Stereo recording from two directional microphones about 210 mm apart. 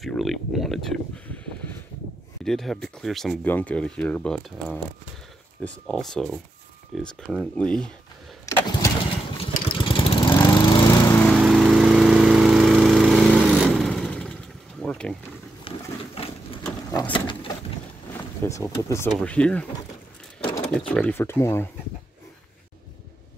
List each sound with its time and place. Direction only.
0.0 s a sound: centre (ahead or behind)
2.4 s speech: centre (ahead or behind)
8.5 s vehicle: 15° left (ahead or behind)
10.3 s lawn mower: 20° left (ahead or behind)
11.2 s lawn mower: centre (ahead or behind)
15.7 s a sound: 25° left (ahead or behind)
18.4 s speech: 15° left (ahead or behind)
20.3 s roaring cats: 20° left (ahead or behind)
20.8 s speech: 5° left (ahead or behind)